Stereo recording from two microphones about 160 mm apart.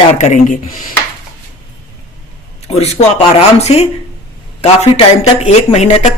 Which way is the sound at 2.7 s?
40° left (ahead or behind).